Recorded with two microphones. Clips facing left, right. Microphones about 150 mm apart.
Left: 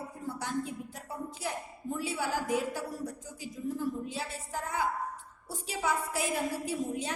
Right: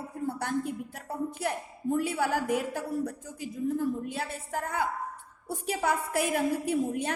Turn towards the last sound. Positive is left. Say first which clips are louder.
# right 5 dB
turn(degrees=-55)  # may be behind; listen again after turning